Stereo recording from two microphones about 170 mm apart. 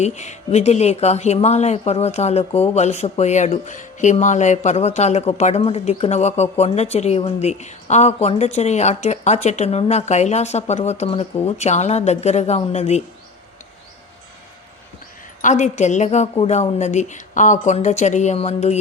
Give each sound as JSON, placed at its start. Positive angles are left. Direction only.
{"t": 0.0, "sound": "speech", "side_deg": 45}
{"t": 15.4, "sound": "speech", "side_deg": 45}